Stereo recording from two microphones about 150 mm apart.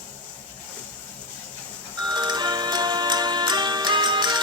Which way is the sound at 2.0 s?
30° right (ahead or behind).